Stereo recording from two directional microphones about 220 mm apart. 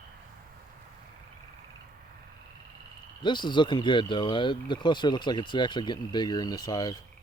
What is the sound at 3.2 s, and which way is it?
Speech, 20° left (ahead or behind).